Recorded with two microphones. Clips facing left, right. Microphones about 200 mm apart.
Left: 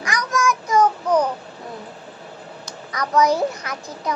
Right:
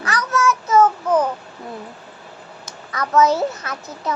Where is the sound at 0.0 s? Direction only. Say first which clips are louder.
Right 2 dB; 15° left (ahead or behind).